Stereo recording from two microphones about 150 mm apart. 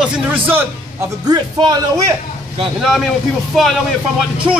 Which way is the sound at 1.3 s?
25° right (ahead or behind).